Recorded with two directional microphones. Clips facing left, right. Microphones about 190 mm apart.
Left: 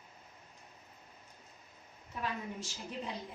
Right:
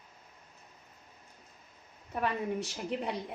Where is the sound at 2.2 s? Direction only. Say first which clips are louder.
Right 7 dB; 65° right (ahead or behind).